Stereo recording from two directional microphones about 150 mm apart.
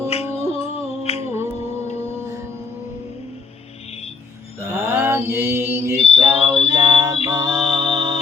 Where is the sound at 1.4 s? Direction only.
15° right (ahead or behind).